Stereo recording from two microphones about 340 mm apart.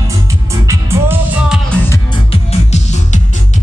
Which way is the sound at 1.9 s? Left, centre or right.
Centre.